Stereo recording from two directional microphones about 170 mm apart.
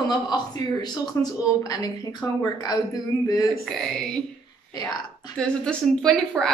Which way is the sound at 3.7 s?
5° left (ahead or behind).